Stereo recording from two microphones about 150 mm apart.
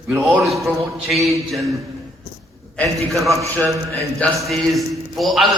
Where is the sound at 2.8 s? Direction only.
Centre (ahead or behind).